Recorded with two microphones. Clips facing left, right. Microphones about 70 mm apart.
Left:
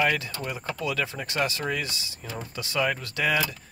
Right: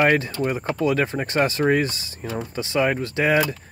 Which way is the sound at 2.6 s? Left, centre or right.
Right.